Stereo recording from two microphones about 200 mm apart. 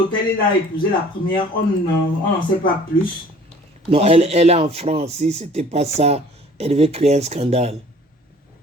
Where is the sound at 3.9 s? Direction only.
30° right (ahead or behind).